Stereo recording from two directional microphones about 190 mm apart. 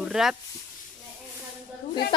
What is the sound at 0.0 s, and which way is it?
Speech, centre (ahead or behind).